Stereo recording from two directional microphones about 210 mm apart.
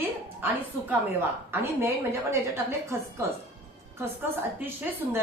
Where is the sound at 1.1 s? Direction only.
10° right (ahead or behind).